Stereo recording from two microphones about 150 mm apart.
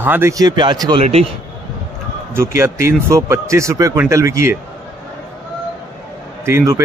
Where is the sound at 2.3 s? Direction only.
20° right (ahead or behind).